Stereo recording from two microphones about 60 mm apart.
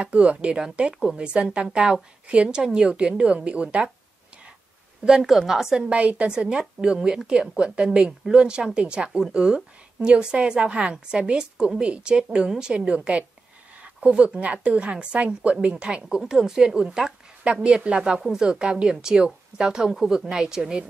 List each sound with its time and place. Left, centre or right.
0.0 s a woman's voice: right
5.0 s a woman's voice: centre